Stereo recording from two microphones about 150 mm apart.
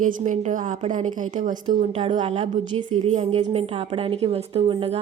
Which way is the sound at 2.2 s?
45° right (ahead or behind).